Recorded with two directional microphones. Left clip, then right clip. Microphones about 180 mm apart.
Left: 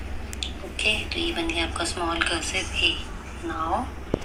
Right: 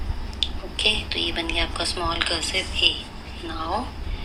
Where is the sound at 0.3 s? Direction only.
40° right (ahead or behind).